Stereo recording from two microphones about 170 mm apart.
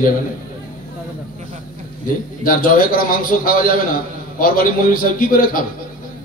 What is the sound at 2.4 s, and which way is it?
A man's voice, 55° left (ahead or behind).